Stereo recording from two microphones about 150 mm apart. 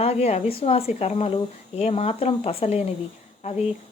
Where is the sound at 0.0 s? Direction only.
45° left (ahead or behind).